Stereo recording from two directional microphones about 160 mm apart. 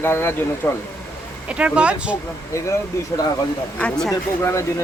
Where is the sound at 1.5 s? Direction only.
5° right (ahead or behind).